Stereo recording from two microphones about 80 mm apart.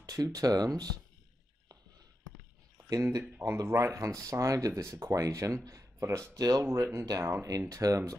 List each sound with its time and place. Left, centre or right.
0.0 s speech: right
2.9 s speech: right
3.6 s speech: right
3.9 s speech: right